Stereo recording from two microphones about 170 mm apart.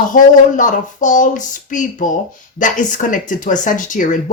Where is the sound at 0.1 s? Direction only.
50° left (ahead or behind).